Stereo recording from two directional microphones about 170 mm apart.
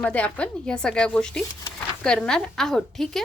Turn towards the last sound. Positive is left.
turn(degrees=0)  # may be behind; listen again after turning